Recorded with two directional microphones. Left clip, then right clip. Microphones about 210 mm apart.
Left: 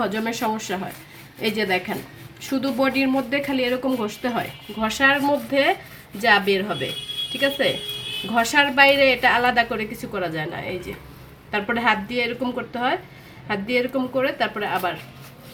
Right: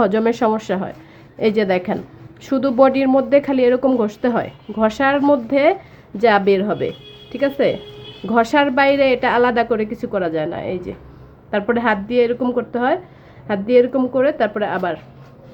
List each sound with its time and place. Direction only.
0.0 s speech: 50° right (ahead or behind)